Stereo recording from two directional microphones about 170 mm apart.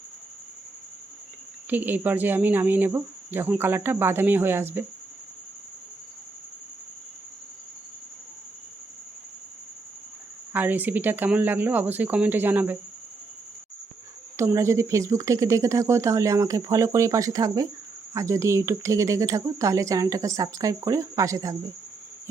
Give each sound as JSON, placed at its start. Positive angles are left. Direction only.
{"t": 1.7, "sound": "speech", "side_deg": -10}
{"t": 10.5, "sound": "speech", "side_deg": -10}
{"t": 14.3, "sound": "speech", "side_deg": -15}